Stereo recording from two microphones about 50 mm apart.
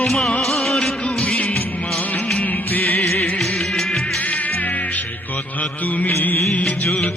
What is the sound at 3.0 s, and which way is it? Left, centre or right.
Music, left.